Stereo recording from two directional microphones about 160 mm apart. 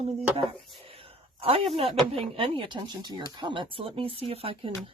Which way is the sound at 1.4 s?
35° right (ahead or behind).